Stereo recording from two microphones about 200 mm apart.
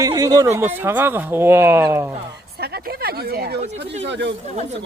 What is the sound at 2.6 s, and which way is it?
Speech, 50° right (ahead or behind).